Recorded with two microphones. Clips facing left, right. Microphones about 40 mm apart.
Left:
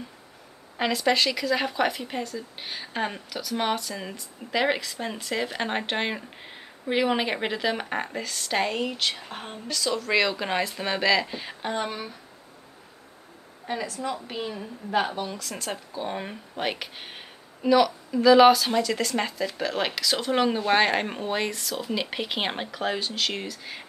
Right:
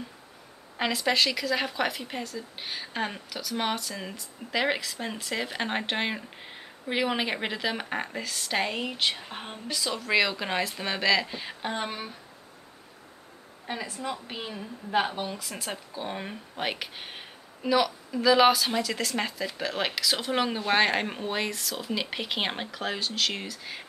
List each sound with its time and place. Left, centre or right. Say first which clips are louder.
0.7 s a woman's voice: left 2 dB; centre
13.8 s a woman's voice: left 3 dB; centre